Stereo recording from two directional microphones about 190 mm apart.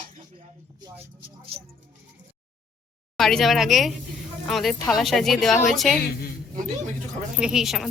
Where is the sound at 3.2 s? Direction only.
Centre (ahead or behind).